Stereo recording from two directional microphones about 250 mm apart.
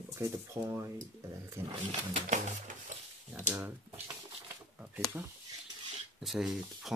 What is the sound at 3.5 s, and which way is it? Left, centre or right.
Speech, centre.